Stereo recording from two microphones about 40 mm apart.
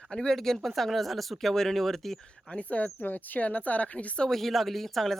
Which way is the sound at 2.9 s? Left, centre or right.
Left.